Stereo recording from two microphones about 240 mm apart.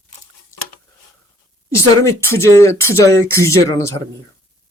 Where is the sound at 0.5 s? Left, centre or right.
Centre.